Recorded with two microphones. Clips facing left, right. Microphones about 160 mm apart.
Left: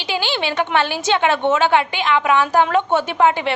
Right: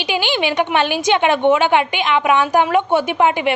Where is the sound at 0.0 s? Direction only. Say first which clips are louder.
Right 3 dB; 15° right (ahead or behind).